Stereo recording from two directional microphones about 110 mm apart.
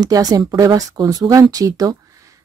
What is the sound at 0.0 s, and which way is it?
Speech, 35° right (ahead or behind).